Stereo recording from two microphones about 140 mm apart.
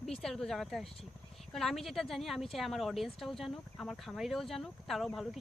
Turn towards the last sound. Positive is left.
turn(degrees=0)  # may be behind; listen again after turning